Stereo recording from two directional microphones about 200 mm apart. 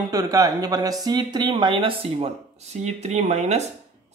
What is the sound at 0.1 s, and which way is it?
A man's voice, 15° right (ahead or behind).